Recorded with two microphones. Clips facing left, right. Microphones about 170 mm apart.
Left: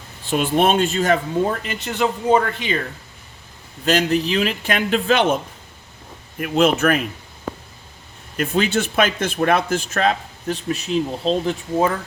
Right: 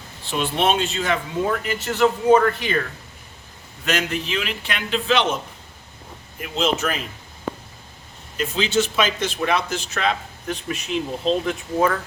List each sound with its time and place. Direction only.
0.3 s speech: 50° left (ahead or behind)
1.5 s speech: 20° left (ahead or behind)
3.8 s speech: 35° left (ahead or behind)
6.4 s speech: 55° left (ahead or behind)
8.4 s speech: 55° left (ahead or behind); by 11.9 s 30° left (ahead or behind)